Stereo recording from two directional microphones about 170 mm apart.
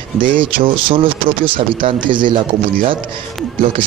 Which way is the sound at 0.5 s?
30° right (ahead or behind).